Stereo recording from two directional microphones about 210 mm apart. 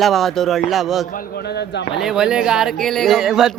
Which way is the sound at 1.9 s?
Centre (ahead or behind).